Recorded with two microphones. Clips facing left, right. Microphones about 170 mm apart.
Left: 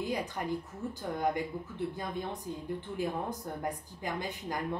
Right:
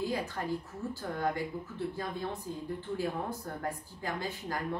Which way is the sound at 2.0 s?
20° left (ahead or behind).